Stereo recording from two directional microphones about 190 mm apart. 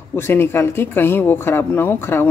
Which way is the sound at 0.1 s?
10° left (ahead or behind).